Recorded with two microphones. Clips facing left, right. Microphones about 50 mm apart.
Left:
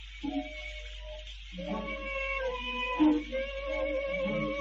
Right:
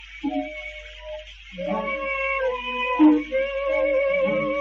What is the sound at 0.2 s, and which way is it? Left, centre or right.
Music, right.